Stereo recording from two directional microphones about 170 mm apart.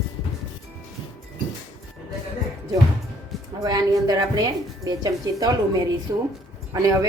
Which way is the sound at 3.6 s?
25° right (ahead or behind).